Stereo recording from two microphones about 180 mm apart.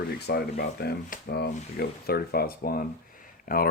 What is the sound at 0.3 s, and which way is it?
Speech, 60° left (ahead or behind).